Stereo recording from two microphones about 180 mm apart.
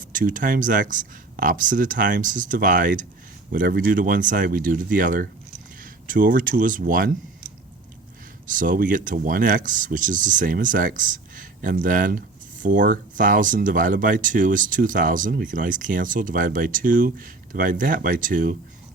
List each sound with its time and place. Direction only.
0.0 s speech: 50° right (ahead or behind)
8.4 s speech: 50° right (ahead or behind)